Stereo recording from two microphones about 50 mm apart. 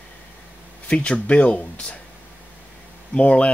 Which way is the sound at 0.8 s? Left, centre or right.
Left.